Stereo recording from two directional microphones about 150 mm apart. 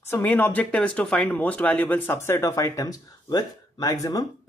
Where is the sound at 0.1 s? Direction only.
15° left (ahead or behind).